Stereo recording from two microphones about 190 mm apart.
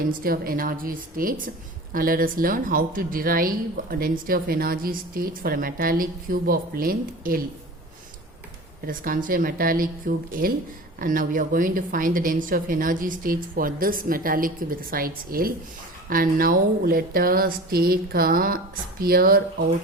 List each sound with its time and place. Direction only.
0.1 s a woman's voice: 50° right (ahead or behind)
8.9 s a woman's voice: 45° right (ahead or behind)